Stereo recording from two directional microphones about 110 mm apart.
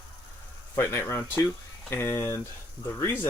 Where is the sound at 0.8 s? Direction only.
25° left (ahead or behind).